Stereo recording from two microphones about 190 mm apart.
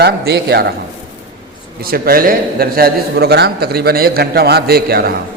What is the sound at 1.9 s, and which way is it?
A man's voice, 50° right (ahead or behind).